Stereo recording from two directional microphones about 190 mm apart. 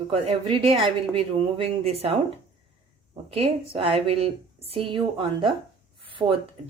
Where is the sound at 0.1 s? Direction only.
30° right (ahead or behind).